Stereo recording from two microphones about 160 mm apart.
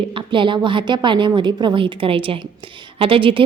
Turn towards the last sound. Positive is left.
turn(degrees=-35)  # may be behind; listen again after turning